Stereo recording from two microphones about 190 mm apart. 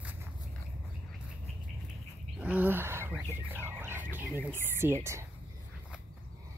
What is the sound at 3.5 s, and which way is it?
Speech, 10° right (ahead or behind).